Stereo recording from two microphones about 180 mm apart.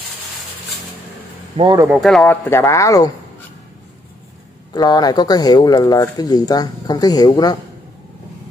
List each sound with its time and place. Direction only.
1.6 s speech: 25° right (ahead or behind)
1.9 s speech: centre (ahead or behind)
2.4 s speech: 15° left (ahead or behind)
4.7 s speech: 20° left (ahead or behind)